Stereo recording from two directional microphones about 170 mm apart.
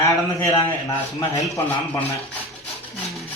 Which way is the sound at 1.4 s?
20° left (ahead or behind).